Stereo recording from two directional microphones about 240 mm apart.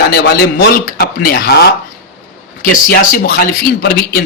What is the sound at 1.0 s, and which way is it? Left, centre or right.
Speech, left.